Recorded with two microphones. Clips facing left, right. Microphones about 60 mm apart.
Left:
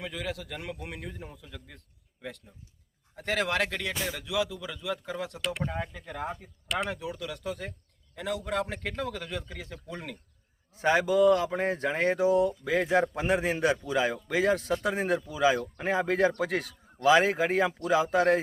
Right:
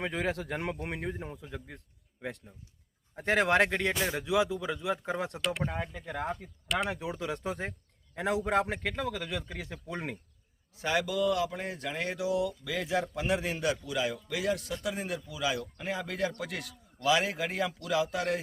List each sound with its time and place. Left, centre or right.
0.0 s a man's voice: right
3.2 s speech: centre
5.4 s speech: centre
6.9 s speech: right
8.8 s speech: centre
10.8 s speech: left